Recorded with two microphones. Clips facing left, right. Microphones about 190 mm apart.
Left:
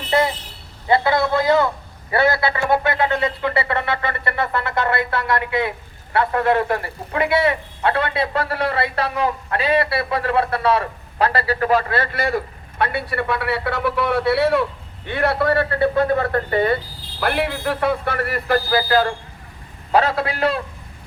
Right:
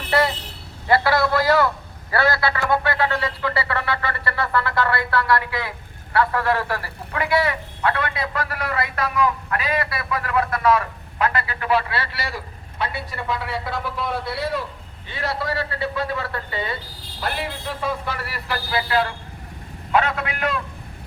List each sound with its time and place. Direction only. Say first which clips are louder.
0.9 s a man's voice: left 1 dB; 20° left (ahead or behind)